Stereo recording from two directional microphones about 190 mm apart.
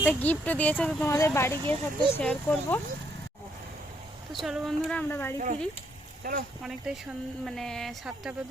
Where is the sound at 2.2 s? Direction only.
5° left (ahead or behind).